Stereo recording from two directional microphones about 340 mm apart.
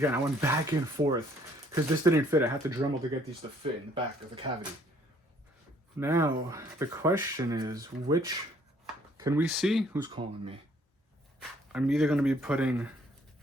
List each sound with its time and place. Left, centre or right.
0.0 s speech: centre
6.0 s speech: centre
11.3 s speech: centre